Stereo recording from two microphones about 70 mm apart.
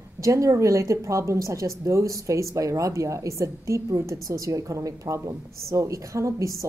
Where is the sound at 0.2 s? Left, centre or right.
Right.